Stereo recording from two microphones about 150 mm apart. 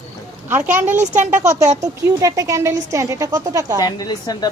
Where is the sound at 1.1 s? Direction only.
55° right (ahead or behind).